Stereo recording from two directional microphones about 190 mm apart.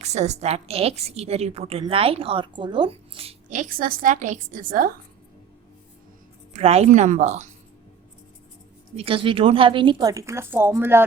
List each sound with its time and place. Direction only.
0.0 s a woman's voice: 35° right (ahead or behind)
6.5 s a woman's voice: 35° right (ahead or behind)
9.0 s speech: 30° right (ahead or behind); by 11.0 s 10° right (ahead or behind)